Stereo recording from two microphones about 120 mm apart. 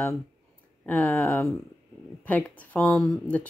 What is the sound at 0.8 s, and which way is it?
Speech, 15° left (ahead or behind).